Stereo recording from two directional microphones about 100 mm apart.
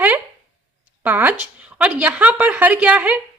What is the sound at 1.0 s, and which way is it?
A woman's voice, 20° right (ahead or behind).